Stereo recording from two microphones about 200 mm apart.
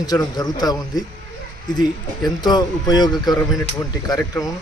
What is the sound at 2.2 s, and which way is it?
Speech, 20° left (ahead or behind).